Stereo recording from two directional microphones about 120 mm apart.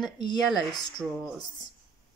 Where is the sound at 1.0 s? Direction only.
15° right (ahead or behind).